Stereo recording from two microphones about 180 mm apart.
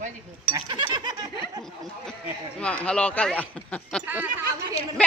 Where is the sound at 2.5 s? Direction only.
5° left (ahead or behind).